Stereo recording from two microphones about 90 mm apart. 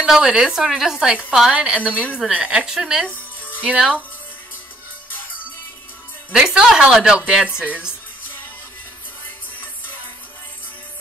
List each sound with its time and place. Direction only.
0.0 s a woman's voice: 5° right (ahead or behind)
3.1 s music: 20° left (ahead or behind)
3.6 s a woman's voice: 10° right (ahead or behind)
6.3 s a woman's voice: 5° right (ahead or behind)